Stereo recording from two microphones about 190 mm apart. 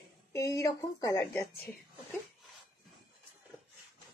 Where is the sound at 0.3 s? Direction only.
15° left (ahead or behind).